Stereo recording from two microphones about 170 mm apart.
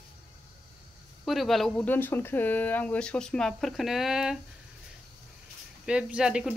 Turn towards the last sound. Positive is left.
turn(degrees=-5)  # may be behind; listen again after turning